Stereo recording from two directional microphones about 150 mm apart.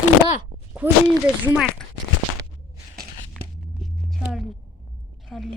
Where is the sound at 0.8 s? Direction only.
10° right (ahead or behind).